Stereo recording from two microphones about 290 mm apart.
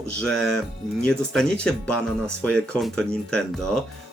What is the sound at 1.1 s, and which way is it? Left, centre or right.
Speech, centre.